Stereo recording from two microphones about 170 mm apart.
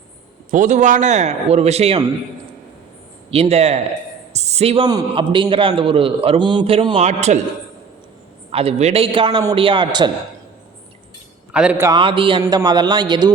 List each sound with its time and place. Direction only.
0.5 s a man's voice: 45° right (ahead or behind)
3.2 s a man's voice: 35° right (ahead or behind)
4.9 s a man's voice: 25° right (ahead or behind); by 7.3 s 40° right (ahead or behind)
8.5 s a man's voice: 35° right (ahead or behind)
11.5 s a man's voice: 10° right (ahead or behind)
11.9 s a man's voice: 30° right (ahead or behind)